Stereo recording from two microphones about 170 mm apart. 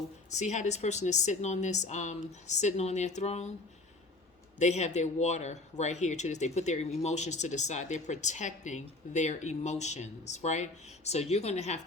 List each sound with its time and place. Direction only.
0.3 s speech: 45° left (ahead or behind)
4.6 s speech: 40° left (ahead or behind)